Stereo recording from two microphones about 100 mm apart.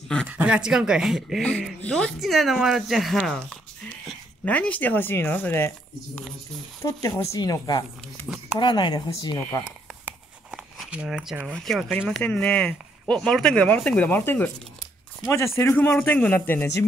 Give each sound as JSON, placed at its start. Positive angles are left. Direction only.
{"t": 0.3, "sound": "speech", "side_deg": -15}
{"t": 1.4, "sound": "speech", "side_deg": 10}
{"t": 6.8, "sound": "speech", "side_deg": 30}
{"t": 8.5, "sound": "speech", "side_deg": 50}
{"t": 9.7, "sound": "a sound", "side_deg": -10}
{"t": 11.5, "sound": "speech", "side_deg": 5}
{"t": 15.8, "sound": "speech", "side_deg": 20}